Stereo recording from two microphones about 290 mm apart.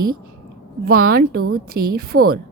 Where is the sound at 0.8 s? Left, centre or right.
Right.